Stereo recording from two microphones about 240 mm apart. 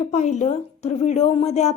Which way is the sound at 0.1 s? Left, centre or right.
Left.